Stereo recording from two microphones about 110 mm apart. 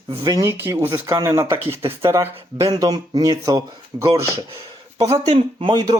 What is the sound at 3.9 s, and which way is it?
Speech, 20° right (ahead or behind).